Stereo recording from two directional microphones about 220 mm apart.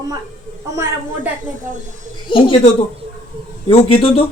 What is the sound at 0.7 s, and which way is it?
Speech, 10° right (ahead or behind).